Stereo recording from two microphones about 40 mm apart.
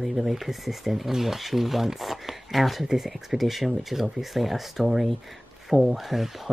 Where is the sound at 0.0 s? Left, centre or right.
Centre.